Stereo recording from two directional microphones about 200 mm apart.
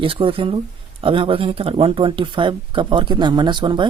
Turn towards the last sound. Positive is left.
turn(degrees=-20)  # may be behind; listen again after turning